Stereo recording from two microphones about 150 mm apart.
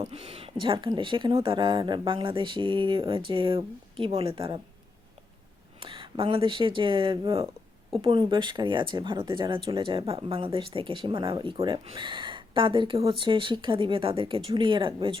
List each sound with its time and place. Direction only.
0.1 s speech: 40° right (ahead or behind)
5.8 s speech: 35° right (ahead or behind)